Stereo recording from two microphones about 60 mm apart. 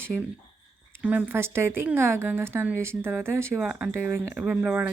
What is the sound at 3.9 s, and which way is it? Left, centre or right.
Speech, right.